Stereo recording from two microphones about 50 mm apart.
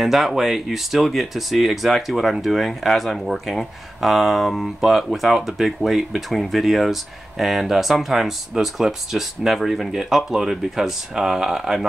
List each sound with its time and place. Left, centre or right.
0.0 s speech: centre